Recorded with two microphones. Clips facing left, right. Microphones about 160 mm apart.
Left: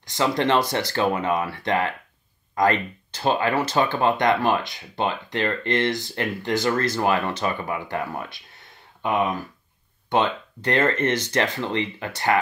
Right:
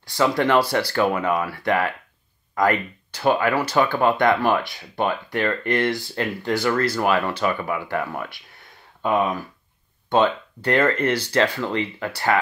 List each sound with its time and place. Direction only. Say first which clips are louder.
0.0 s speech: right 2 dB; 20° left (ahead or behind)
10.7 s speech: right 2 dB; 20° left (ahead or behind)